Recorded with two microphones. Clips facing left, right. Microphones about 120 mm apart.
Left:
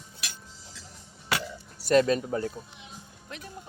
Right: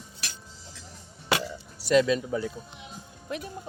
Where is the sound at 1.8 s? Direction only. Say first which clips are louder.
Even; 45° left (ahead or behind).